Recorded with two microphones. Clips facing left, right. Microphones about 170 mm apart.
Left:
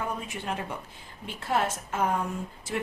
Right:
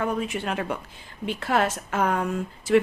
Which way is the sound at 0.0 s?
75° right (ahead or behind).